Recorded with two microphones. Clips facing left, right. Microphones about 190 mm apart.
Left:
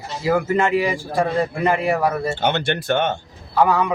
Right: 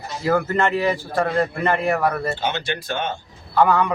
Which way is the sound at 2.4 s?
65° left (ahead or behind).